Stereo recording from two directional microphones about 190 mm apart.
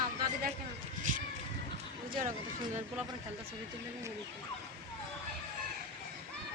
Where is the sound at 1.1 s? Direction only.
45° right (ahead or behind).